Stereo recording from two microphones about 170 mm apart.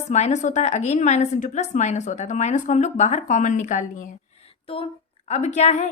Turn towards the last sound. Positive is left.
turn(degrees=40)  # may be behind; listen again after turning